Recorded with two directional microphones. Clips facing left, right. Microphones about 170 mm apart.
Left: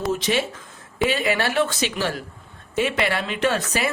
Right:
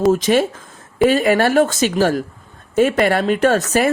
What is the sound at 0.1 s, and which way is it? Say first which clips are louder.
A woman's voice: right 8 dB; 45° right (ahead or behind).